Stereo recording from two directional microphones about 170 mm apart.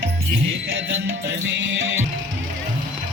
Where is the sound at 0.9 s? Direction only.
90° right.